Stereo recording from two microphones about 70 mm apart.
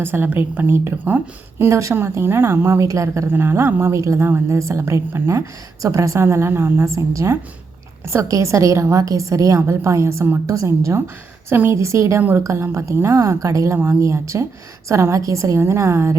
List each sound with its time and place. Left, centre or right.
0.0 s a woman's voice: right
1.5 s a woman's voice: right
2.8 s a woman's voice: right
3.3 s a woman's voice: right
4.0 s a woman's voice: right
5.8 s a woman's voice: right
13.7 s a woman's voice: right